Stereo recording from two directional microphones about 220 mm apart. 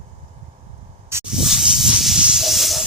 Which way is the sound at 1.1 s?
5° right (ahead or behind).